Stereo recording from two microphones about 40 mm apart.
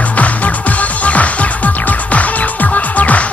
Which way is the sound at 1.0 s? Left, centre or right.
Left.